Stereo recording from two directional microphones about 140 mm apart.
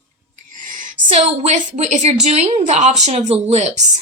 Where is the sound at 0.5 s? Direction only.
70° right (ahead or behind).